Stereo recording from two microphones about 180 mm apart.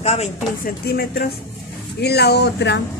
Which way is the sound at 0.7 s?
60° left (ahead or behind).